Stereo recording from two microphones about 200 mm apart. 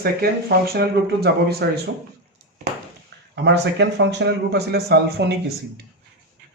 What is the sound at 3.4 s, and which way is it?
Speech, 60° right (ahead or behind).